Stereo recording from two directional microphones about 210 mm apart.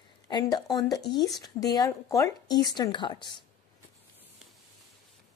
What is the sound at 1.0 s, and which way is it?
Speech, 50° left (ahead or behind).